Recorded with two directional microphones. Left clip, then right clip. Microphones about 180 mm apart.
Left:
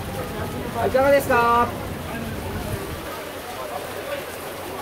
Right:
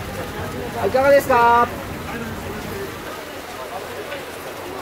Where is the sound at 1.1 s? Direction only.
20° right (ahead or behind).